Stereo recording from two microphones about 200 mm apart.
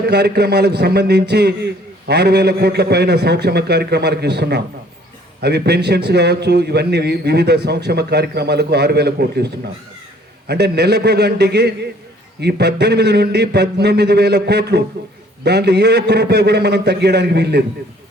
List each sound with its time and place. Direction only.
0.0 s a man's voice: 55° right (ahead or behind)